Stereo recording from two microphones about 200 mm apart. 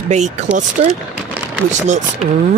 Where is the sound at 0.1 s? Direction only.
35° right (ahead or behind).